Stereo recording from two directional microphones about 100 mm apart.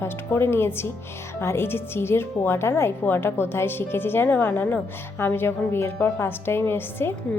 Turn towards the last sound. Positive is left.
turn(degrees=25)  # may be behind; listen again after turning